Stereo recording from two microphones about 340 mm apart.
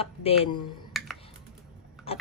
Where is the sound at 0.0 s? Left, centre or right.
Centre.